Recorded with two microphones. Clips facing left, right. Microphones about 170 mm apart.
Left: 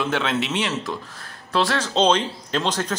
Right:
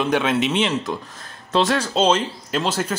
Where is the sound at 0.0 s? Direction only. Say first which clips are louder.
Right 4 dB; 15° right (ahead or behind).